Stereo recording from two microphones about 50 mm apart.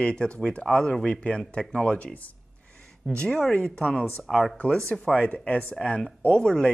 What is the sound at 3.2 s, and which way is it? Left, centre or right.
Speech, centre.